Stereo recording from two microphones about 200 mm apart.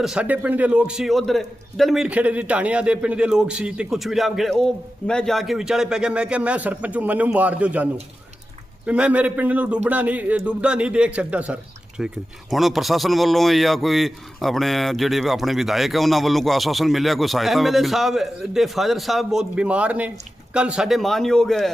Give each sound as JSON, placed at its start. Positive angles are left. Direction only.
{"t": 0.0, "sound": "speech", "side_deg": -5}
{"t": 8.9, "sound": "speech", "side_deg": -5}